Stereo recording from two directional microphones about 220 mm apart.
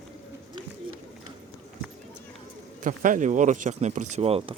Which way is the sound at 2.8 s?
35° right (ahead or behind).